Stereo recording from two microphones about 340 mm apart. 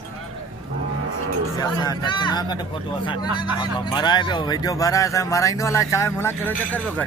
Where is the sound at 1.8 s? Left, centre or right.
Centre.